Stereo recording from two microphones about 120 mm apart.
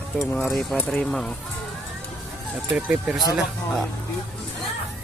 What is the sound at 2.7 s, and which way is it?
Speech, 10° right (ahead or behind).